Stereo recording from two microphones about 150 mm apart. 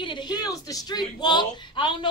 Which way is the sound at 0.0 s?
30° left (ahead or behind).